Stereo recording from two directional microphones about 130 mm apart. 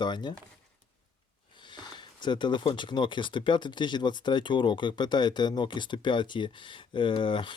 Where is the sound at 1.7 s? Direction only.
35° left (ahead or behind).